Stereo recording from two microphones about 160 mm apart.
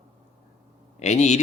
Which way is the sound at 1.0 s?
45° left (ahead or behind).